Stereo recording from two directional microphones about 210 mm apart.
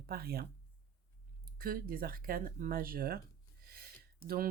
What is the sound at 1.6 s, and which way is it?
Speech, 45° right (ahead or behind).